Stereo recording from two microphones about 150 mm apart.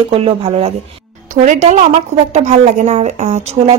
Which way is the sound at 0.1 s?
40° right (ahead or behind).